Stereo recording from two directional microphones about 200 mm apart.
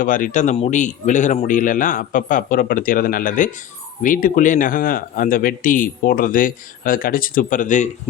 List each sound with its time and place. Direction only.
0.0 s a man's voice: 40° left (ahead or behind)